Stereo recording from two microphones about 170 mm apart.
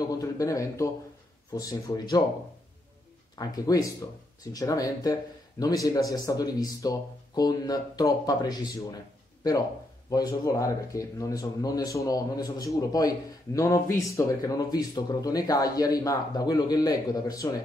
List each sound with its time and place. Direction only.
0.0 s a sound: 20° left (ahead or behind)
1.5 s speech: 20° left (ahead or behind)
3.3 s speech: 20° left (ahead or behind)
10.0 s speech: 20° left (ahead or behind)